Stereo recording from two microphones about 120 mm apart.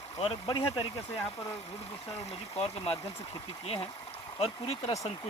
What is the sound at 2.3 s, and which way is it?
Speech, 55° left (ahead or behind).